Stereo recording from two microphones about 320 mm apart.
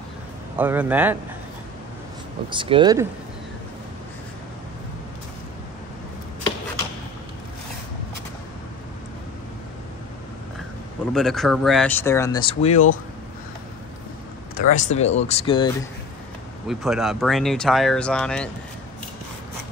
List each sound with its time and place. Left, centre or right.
0.6 s speech: centre
2.5 s speech: centre
11.1 s speech: centre; by 12.9 s left
14.6 s speech: left
16.6 s speech: centre